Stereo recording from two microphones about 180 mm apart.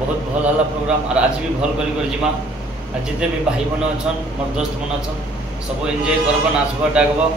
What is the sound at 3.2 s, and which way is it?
Speech, 5° right (ahead or behind).